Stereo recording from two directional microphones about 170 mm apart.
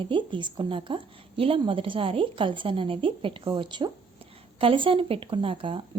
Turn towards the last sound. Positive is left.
turn(degrees=-30)  # may be behind; listen again after turning